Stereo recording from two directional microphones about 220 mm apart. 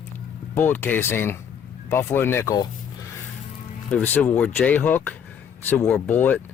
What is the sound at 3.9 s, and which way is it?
Speech, 5° left (ahead or behind).